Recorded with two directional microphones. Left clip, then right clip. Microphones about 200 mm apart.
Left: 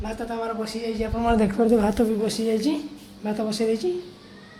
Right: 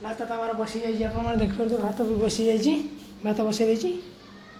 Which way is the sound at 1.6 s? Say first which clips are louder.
Left 7 dB; 35° left (ahead or behind).